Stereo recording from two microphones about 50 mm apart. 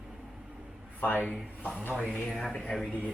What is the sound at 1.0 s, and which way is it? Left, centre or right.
Speech, left.